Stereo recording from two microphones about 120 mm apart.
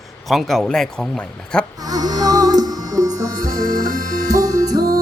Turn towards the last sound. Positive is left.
turn(degrees=-30)  # may be behind; listen again after turning